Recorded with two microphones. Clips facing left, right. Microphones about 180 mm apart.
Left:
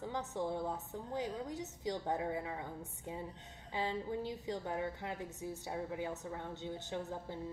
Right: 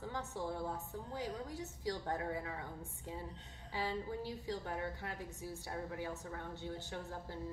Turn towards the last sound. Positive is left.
turn(degrees=20)  # may be behind; listen again after turning